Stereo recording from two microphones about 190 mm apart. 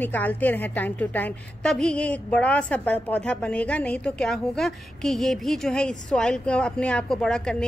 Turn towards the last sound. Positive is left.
turn(degrees=5)  # may be behind; listen again after turning